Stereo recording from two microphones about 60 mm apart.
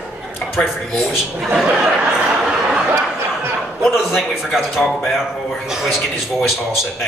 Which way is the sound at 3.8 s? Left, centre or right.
Centre.